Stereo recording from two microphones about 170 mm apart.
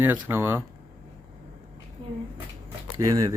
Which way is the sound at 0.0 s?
15° right (ahead or behind).